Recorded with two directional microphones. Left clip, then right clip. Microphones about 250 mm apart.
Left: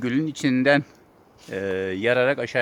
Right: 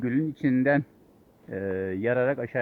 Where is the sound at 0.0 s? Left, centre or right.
Centre.